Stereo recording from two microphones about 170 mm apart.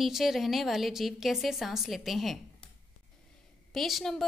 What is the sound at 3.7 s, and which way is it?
Speech, centre (ahead or behind).